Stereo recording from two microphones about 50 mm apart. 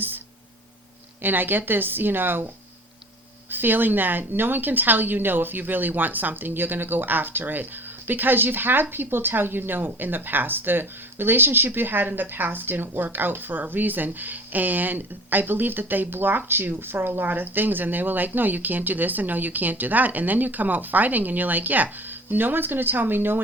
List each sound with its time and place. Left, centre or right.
1.2 s speech: right
3.5 s speech: right